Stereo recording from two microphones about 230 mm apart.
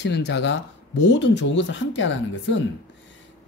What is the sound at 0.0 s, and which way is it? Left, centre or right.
Speech, left.